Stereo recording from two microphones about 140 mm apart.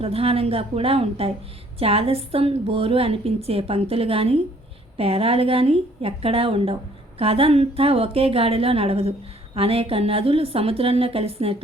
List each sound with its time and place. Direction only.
0.0 s a woman's voice: 45° right (ahead or behind)